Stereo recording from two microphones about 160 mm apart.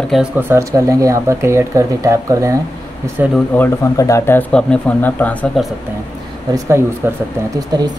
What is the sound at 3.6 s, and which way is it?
A man's voice, 20° left (ahead or behind).